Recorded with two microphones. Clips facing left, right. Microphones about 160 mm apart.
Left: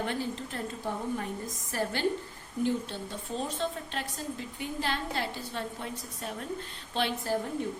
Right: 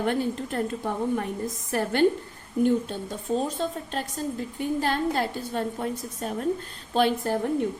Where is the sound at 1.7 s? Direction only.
55° right (ahead or behind).